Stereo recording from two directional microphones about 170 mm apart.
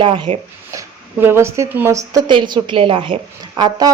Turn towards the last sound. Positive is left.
turn(degrees=-25)  # may be behind; listen again after turning